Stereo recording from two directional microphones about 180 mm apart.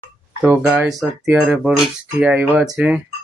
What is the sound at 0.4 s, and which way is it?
Speech, 10° right (ahead or behind).